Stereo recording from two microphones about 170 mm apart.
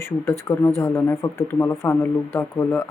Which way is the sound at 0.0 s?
15° left (ahead or behind).